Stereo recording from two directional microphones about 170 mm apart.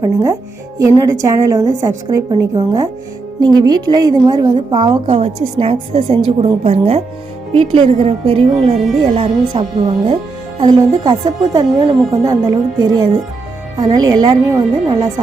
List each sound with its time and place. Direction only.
0.0 s a woman's voice: 15° right (ahead or behind)
5.1 s a woman's voice: 35° right (ahead or behind)